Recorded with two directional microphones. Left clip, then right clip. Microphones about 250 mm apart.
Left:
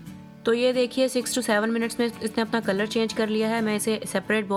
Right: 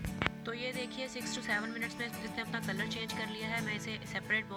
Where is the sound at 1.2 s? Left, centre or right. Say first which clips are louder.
Left 12 dB; centre.